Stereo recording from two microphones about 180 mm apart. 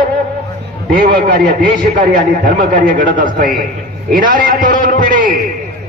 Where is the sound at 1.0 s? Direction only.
55° right (ahead or behind).